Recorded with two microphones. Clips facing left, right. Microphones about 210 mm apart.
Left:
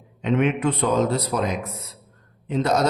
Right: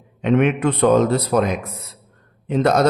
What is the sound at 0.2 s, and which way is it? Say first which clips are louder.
A man's voice: right 4 dB; 60° right (ahead or behind).